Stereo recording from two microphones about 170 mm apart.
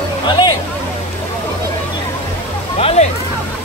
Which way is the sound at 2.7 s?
35° left (ahead or behind).